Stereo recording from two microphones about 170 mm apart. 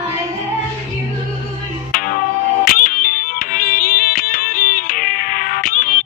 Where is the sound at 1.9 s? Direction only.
55° left (ahead or behind).